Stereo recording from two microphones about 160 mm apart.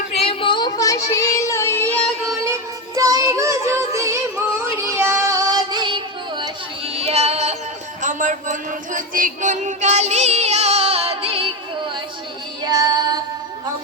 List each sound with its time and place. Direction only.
0.1 s child singing: 40° left (ahead or behind); by 1.9 s 15° left (ahead or behind)
2.9 s music: 20° right (ahead or behind)
4.9 s child singing: 15° right (ahead or behind); by 7.5 s 40° right (ahead or behind)
8.0 s a sound: 50° right (ahead or behind); by 11.5 s 35° right (ahead or behind)
12.6 s music: 25° right (ahead or behind)